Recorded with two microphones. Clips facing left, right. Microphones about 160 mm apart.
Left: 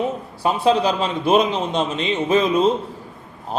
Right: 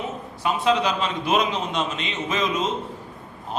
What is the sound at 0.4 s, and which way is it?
A man's voice, 35° left (ahead or behind).